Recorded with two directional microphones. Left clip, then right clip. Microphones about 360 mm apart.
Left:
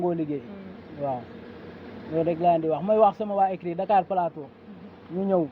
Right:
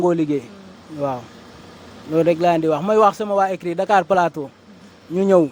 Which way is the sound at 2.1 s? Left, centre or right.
Right.